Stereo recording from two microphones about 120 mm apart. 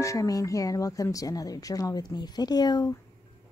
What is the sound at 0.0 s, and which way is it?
Speech, 25° left (ahead or behind).